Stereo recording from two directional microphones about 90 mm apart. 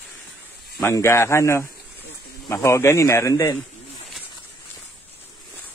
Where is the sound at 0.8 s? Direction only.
35° left (ahead or behind).